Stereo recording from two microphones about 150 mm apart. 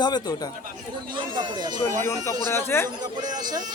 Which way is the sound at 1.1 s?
30° right (ahead or behind).